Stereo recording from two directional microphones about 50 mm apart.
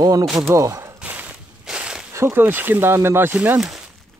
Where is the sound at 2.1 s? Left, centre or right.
Right.